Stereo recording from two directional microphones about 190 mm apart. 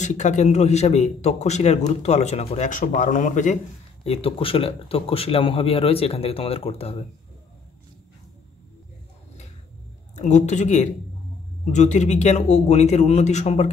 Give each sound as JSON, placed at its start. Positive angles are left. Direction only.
{"t": 0.0, "sound": "a man's voice", "side_deg": 40}
{"t": 4.0, "sound": "a man's voice", "side_deg": 30}
{"t": 10.1, "sound": "a man's voice", "side_deg": 40}